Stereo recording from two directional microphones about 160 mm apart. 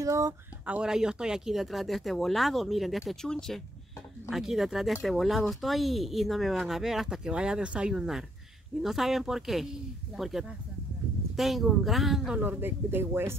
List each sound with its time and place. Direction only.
0.0 s speech: 20° right (ahead or behind)
0.7 s speech: 5° right (ahead or behind)